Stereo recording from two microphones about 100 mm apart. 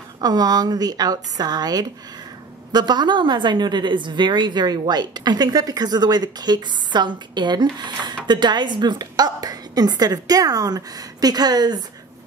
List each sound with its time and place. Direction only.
0.2 s a woman's voice: 40° right (ahead or behind)